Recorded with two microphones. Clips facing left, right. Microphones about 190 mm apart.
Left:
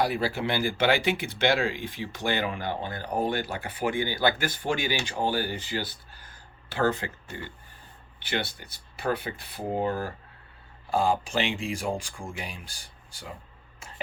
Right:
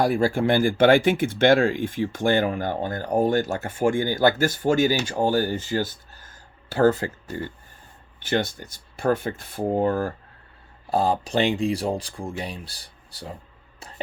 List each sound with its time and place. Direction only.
0.0 s speech: 45° right (ahead or behind)
10.8 s speech: 35° right (ahead or behind)